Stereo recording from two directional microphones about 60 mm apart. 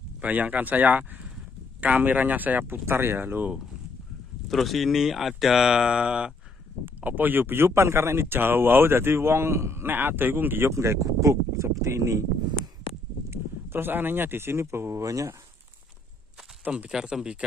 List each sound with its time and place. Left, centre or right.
0.2 s a man's voice: right
2.8 s speech: right
4.5 s speech: centre
7.0 s speech: right
9.8 s speech: right
10.7 s speech: right
13.3 s speech: right
16.7 s speech: centre